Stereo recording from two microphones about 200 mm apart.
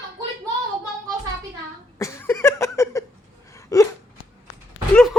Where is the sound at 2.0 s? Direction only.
15° left (ahead or behind).